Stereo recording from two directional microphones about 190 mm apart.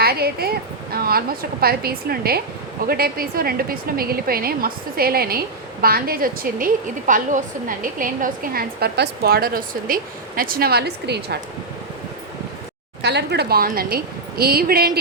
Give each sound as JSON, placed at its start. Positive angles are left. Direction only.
{"t": 0.0, "sound": "a woman's voice", "side_deg": -55}
{"t": 13.0, "sound": "a woman's voice", "side_deg": -65}